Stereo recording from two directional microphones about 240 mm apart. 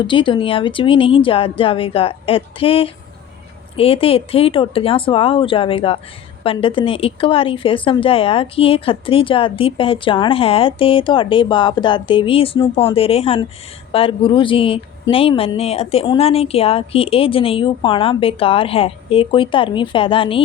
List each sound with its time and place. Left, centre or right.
0.0 s a woman's voice: left